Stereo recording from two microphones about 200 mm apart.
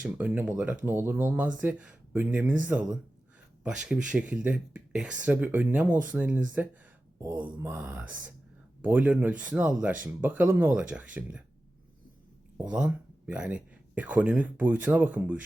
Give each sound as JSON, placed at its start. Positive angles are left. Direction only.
{"t": 0.1, "sound": "speech", "side_deg": -10}
{"t": 7.2, "sound": "speech", "side_deg": -20}
{"t": 12.5, "sound": "speech", "side_deg": -5}